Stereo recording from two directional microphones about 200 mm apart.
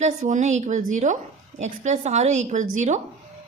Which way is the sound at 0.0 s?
35° right (ahead or behind).